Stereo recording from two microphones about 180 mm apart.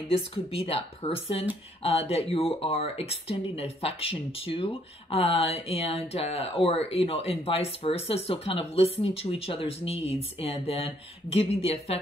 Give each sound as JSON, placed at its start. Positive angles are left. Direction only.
{"t": 0.1, "sound": "speech", "side_deg": 30}